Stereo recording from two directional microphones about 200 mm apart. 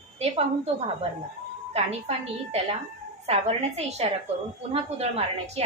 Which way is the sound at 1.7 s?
30° right (ahead or behind).